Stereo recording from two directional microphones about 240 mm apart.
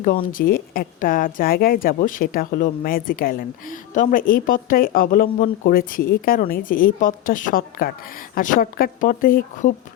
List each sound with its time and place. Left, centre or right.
0.3 s speech: left